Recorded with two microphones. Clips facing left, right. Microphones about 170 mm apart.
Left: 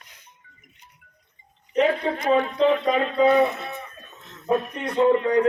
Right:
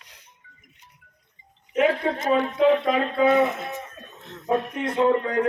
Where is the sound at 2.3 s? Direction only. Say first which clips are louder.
Even; 5° right (ahead or behind).